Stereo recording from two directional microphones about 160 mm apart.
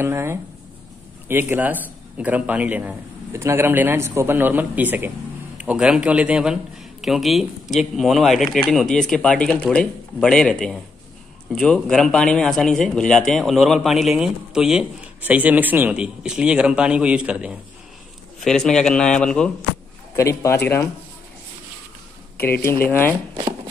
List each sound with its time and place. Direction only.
0.0 s a man's voice: 15° right (ahead or behind); by 19.5 s 5° left (ahead or behind)
20.2 s speech: 20° left (ahead or behind)
22.5 s speech: 15° left (ahead or behind)